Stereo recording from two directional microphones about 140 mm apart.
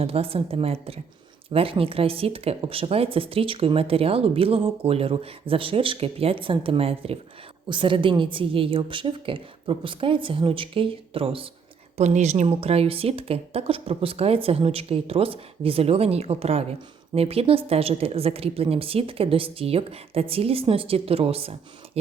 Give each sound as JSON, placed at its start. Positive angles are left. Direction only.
{"t": 0.0, "sound": "a woman's voice", "side_deg": -45}
{"t": 11.9, "sound": "speech", "side_deg": -55}